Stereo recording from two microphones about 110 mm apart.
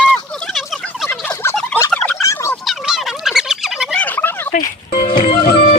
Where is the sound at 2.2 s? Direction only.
30° left (ahead or behind).